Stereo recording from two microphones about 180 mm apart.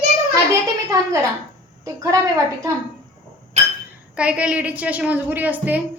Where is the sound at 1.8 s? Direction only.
15° right (ahead or behind).